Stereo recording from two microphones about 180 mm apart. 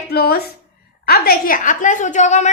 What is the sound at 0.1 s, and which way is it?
A woman's voice, 60° left (ahead or behind).